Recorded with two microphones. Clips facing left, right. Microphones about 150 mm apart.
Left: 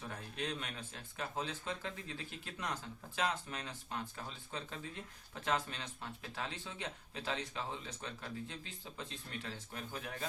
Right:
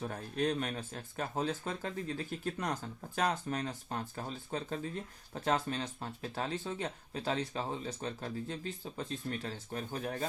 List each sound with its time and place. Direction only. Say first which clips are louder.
0.0 s speech: right 9 dB; 45° right (ahead or behind)